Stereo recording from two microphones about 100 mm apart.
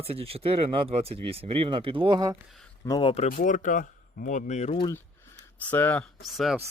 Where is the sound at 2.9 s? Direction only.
45° left (ahead or behind).